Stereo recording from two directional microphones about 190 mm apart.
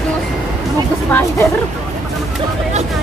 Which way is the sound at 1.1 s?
10° left (ahead or behind).